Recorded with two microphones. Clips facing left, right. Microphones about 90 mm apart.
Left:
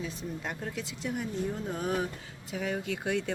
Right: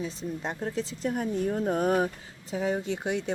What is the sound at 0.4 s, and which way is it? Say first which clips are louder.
Speech: right 8 dB; 30° right (ahead or behind).